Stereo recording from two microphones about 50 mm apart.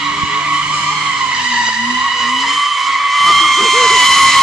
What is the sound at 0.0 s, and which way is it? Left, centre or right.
Skidding, centre.